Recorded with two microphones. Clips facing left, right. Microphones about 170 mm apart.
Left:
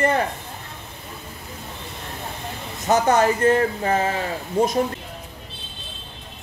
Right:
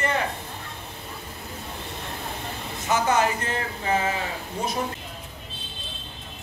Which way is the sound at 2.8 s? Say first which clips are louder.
Left 5 dB; 45° left (ahead or behind).